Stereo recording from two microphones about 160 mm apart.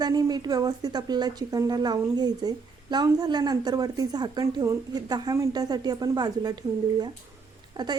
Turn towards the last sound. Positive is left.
turn(degrees=-30)  # may be behind; listen again after turning